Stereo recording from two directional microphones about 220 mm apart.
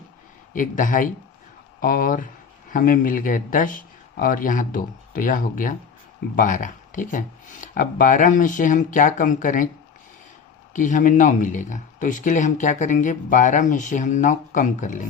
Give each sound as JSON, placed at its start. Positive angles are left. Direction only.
{"t": 0.5, "sound": "speech", "side_deg": 35}
{"t": 10.8, "sound": "speech", "side_deg": 35}